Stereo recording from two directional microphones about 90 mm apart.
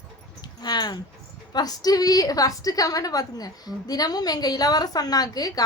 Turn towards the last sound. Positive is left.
turn(degrees=45)  # may be behind; listen again after turning